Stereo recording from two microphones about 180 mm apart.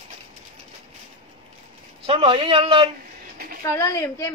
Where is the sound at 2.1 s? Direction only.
30° right (ahead or behind).